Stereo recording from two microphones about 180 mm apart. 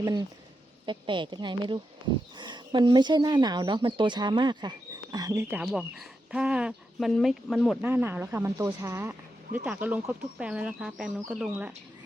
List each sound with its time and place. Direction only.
0.0 s speech: 20° right (ahead or behind); by 7.8 s centre (ahead or behind)
7.8 s speech: 10° right (ahead or behind)